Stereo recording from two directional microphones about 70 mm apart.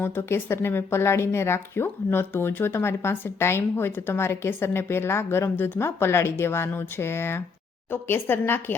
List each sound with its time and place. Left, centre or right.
0.0 s a woman's voice: left